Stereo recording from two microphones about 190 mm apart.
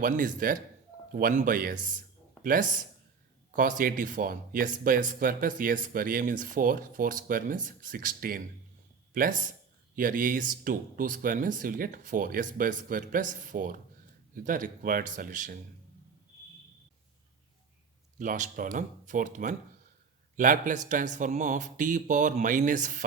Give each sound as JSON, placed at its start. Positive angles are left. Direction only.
{"t": 0.0, "sound": "speech", "side_deg": -45}
{"t": 9.9, "sound": "speech", "side_deg": -45}
{"t": 18.2, "sound": "speech", "side_deg": -45}